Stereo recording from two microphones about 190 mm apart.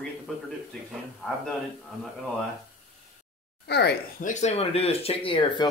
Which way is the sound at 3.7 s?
60° left (ahead or behind).